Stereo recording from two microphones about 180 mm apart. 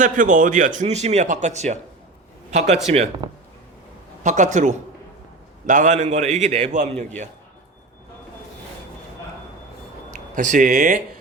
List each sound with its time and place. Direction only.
0.0 s a man's voice: 45° right (ahead or behind)
4.2 s a man's voice: 45° right (ahead or behind)
10.1 s speech: 45° right (ahead or behind)